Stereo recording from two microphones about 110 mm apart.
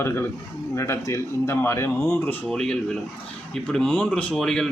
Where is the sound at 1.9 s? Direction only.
10° left (ahead or behind).